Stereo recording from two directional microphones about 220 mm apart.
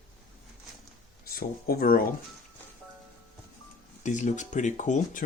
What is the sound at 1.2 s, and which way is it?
Speech, 45° left (ahead or behind).